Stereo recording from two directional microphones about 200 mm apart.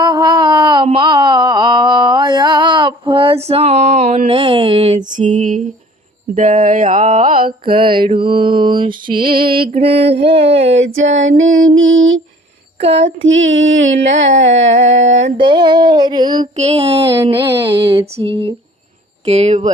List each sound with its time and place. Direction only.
0.0 s a sound: 20° right (ahead or behind); by 5.6 s 40° right (ahead or behind)
6.3 s mantra: 40° right (ahead or behind)
7.6 s mantra: 25° right (ahead or behind)
9.0 s mantra: 45° right (ahead or behind)
9.8 s mantra: 30° right (ahead or behind)
10.8 s a sound: 70° right (ahead or behind)
11.5 s music: 80° right
13.2 s a sound: 75° right (ahead or behind)
15.4 s mantra: 25° right (ahead or behind)
16.4 s mantra: 35° right (ahead or behind)